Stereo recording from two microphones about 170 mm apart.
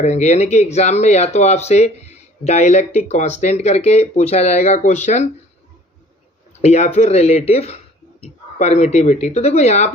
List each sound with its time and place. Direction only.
0.0 s speech: 40° left (ahead or behind)
6.6 s speech: 40° left (ahead or behind)